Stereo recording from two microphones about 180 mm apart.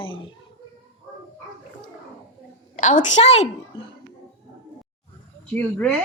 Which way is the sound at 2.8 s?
40° left (ahead or behind).